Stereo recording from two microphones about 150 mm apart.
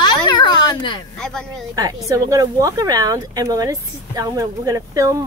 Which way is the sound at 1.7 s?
25° right (ahead or behind).